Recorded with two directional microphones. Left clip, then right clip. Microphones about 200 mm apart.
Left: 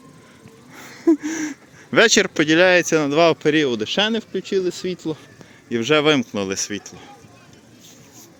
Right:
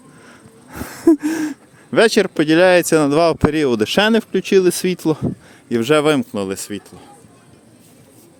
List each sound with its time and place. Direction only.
0.7 s gasp: 35° right (ahead or behind)
1.9 s speech: 10° right (ahead or behind); by 5.2 s 45° right (ahead or behind)
5.6 s speech: 25° right (ahead or behind)